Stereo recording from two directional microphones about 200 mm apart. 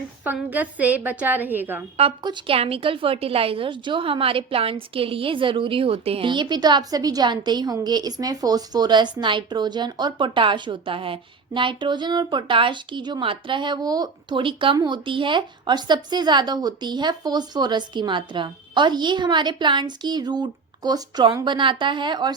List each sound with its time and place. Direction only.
0.3 s a woman's voice: 10° right (ahead or behind)
2.0 s a woman's voice: 25° right (ahead or behind)